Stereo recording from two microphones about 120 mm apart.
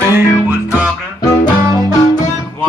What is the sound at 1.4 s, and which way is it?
Music, 35° left (ahead or behind).